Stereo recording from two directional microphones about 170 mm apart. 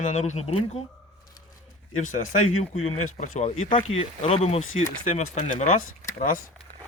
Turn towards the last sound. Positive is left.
turn(degrees=45)  # may be behind; listen again after turning